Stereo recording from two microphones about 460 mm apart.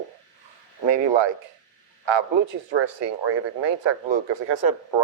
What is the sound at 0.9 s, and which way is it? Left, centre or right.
Speech, right.